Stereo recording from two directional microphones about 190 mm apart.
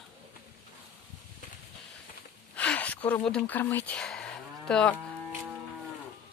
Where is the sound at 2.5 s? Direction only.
10° left (ahead or behind).